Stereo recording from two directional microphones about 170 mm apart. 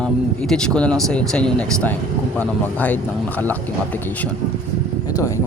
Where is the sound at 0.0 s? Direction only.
5° left (ahead or behind).